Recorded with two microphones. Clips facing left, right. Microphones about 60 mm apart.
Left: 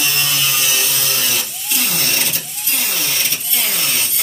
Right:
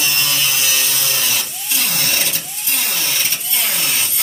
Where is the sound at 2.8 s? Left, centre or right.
Centre.